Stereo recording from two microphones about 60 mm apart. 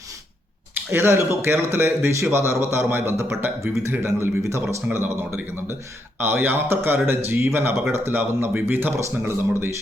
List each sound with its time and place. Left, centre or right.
0.7 s speech: right
4.9 s speech: right
9.0 s speech: right